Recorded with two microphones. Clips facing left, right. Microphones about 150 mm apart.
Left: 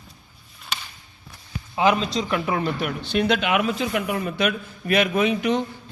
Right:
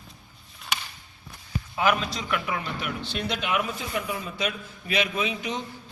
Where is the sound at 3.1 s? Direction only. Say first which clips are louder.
Left 8 dB; 65° left (ahead or behind).